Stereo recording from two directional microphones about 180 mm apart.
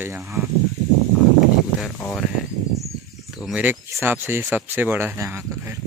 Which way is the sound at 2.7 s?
Centre (ahead or behind).